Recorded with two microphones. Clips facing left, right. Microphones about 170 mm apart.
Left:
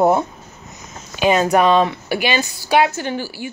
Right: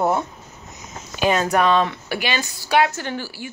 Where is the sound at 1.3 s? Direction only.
15° left (ahead or behind).